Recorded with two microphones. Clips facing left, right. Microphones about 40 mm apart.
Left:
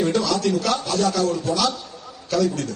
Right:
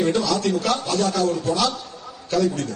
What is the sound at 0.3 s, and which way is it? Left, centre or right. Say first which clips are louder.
A man's voice: even; right.